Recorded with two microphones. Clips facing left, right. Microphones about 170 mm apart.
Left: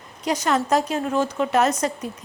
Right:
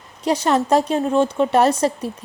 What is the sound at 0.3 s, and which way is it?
A woman's voice, 30° right (ahead or behind).